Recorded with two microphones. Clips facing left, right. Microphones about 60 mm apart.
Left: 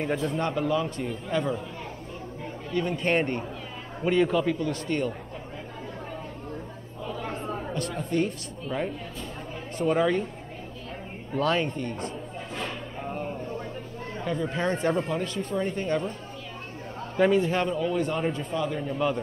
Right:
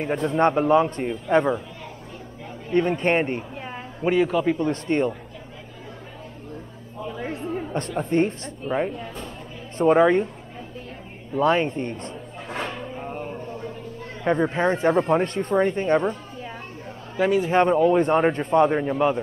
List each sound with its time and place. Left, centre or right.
0.4 s a man's voice: right
2.7 s a man's voice: right
3.2 s a man's voice: centre
4.6 s a man's voice: right
7.7 s a man's voice: right
11.3 s speech: right
13.0 s a sound: centre
14.2 s a man's voice: right
14.6 s speech: right
15.0 s a man's voice: right
17.2 s a man's voice: centre
17.5 s a man's voice: right